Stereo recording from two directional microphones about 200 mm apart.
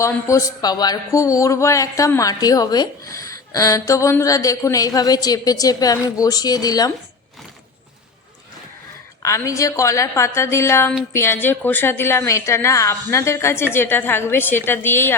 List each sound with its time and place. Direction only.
0.0 s speech: 15° left (ahead or behind)
9.2 s speech: 15° left (ahead or behind)